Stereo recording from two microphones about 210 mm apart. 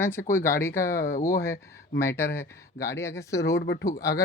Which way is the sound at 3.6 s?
50° left (ahead or behind).